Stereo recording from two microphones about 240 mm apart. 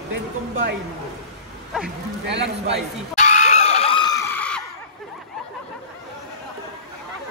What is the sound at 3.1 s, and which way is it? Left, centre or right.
Screaming, left.